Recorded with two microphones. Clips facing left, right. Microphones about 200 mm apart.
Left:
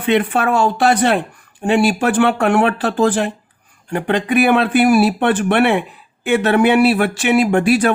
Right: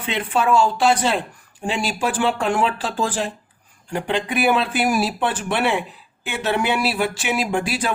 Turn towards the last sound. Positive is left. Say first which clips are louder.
# left 9 dB
turn(degrees=65)  # may be behind; listen again after turning